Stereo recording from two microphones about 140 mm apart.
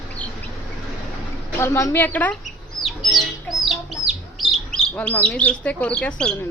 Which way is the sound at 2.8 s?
Centre (ahead or behind).